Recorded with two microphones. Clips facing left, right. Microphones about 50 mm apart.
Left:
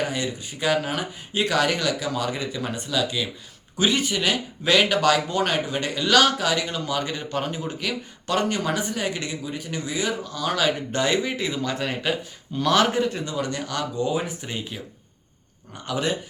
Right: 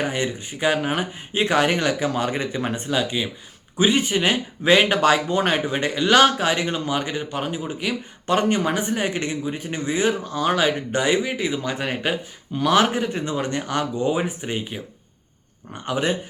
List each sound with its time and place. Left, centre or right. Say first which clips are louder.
0.0 s speech: right 2 dB; right